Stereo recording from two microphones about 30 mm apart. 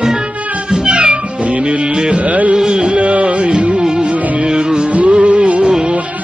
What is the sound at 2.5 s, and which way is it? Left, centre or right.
Music, right.